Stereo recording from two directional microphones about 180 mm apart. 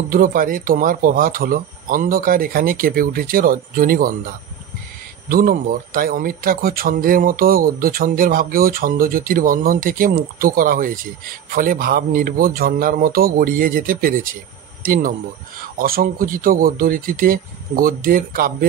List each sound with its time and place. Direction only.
0.1 s speech: 50° right (ahead or behind)
5.3 s speech: 50° right (ahead or behind)